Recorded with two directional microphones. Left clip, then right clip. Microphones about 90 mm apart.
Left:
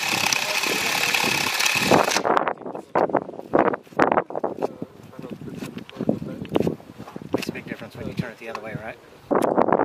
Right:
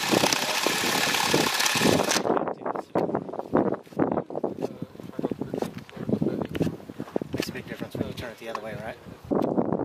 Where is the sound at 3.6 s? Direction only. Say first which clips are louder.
Left 7 dB; 35° left (ahead or behind).